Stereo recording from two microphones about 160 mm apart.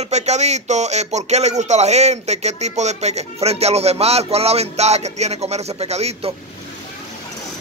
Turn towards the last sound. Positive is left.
turn(degrees=-40)  # may be behind; listen again after turning